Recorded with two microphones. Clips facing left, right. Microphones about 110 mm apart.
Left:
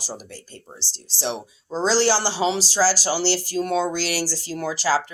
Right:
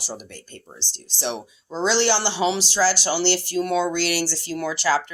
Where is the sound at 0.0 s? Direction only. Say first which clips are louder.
Even; 35° left (ahead or behind).